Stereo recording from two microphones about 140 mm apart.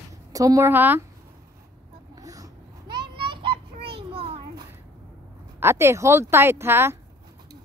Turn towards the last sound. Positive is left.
turn(degrees=-15)  # may be behind; listen again after turning